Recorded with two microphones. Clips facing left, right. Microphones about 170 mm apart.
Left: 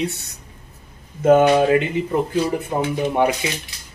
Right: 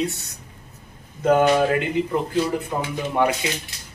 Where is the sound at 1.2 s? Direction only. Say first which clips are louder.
Left 4 dB; 20° left (ahead or behind).